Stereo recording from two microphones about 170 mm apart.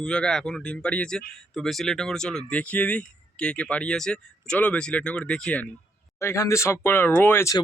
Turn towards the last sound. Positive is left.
turn(degrees=15)  # may be behind; listen again after turning